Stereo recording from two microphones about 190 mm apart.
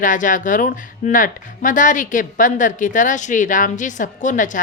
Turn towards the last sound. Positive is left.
turn(degrees=40)  # may be behind; listen again after turning